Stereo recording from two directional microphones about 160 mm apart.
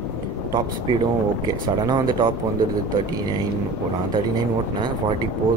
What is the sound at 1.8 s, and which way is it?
Speech, 25° right (ahead or behind).